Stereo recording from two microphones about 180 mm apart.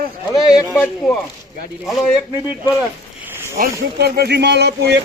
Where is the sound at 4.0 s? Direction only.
65° right (ahead or behind).